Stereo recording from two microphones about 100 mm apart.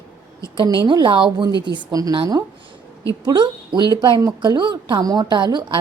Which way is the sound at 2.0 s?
35° right (ahead or behind).